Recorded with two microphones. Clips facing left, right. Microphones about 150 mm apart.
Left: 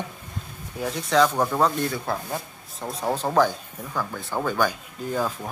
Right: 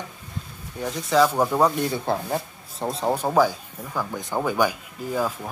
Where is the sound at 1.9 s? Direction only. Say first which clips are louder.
Right 3 dB; 25° right (ahead or behind).